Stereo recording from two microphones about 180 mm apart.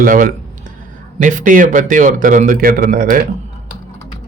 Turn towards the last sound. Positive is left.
turn(degrees=-50)  # may be behind; listen again after turning